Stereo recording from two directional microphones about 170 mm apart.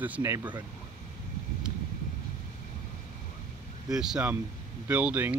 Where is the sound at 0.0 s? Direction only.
15° right (ahead or behind).